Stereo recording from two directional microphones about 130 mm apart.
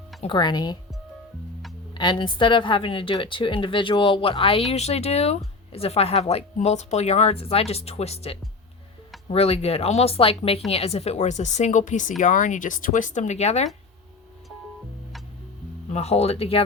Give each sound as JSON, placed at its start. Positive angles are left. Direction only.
{"t": 0.2, "sound": "speech", "side_deg": 35}
{"t": 2.0, "sound": "speech", "side_deg": 35}
{"t": 15.9, "sound": "speech", "side_deg": 55}